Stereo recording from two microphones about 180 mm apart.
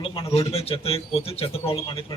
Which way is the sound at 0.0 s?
30° left (ahead or behind).